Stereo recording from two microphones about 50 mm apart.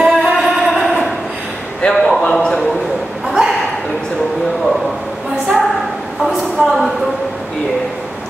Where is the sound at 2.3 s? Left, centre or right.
Centre.